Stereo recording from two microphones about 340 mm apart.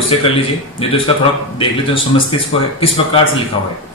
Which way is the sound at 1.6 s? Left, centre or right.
Centre.